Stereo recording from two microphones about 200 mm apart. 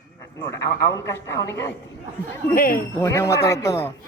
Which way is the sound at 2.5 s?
45° left (ahead or behind).